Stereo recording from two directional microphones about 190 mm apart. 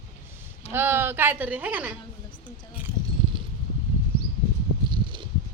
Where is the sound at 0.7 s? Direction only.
10° right (ahead or behind).